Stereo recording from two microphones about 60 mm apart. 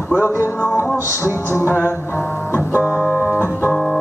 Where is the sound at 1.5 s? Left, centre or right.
Left.